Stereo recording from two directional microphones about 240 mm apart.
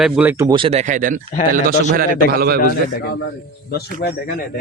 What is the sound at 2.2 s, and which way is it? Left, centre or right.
Speech, right.